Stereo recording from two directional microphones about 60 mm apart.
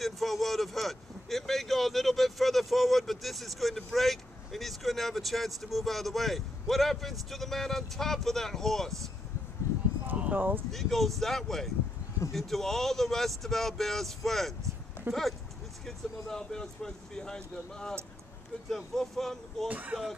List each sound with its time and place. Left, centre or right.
0.0 s speech: centre
9.6 s a sound: left
10.0 s a sound: right
10.7 s speech: centre
15.1 s speech: right
15.8 s speech: centre
18.9 s speech: centre
19.7 s speech: right